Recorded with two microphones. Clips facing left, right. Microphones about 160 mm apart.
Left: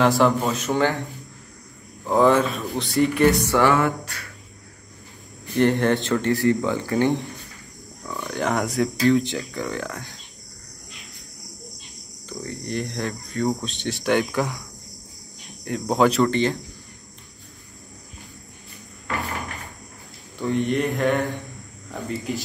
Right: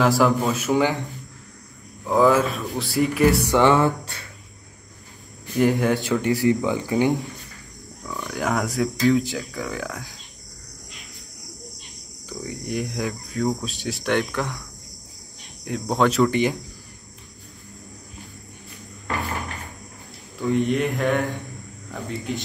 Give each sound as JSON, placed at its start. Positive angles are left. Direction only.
{"t": 0.0, "sound": "speech", "side_deg": 0}
{"t": 2.0, "sound": "speech", "side_deg": 0}
{"t": 3.4, "sound": "music", "side_deg": -20}
{"t": 5.6, "sound": "speech", "side_deg": -5}
{"t": 8.0, "sound": "speech", "side_deg": 0}
{"t": 12.4, "sound": "speech", "side_deg": -15}
{"t": 12.8, "sound": "speech", "side_deg": 0}
{"t": 16.3, "sound": "speech", "side_deg": -15}
{"t": 20.3, "sound": "speech", "side_deg": 0}
{"t": 22.3, "sound": "speech", "side_deg": 0}